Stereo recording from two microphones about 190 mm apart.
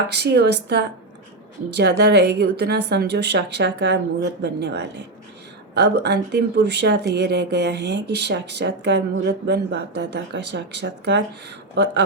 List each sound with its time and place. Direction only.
0.1 s speech: 60° right (ahead or behind)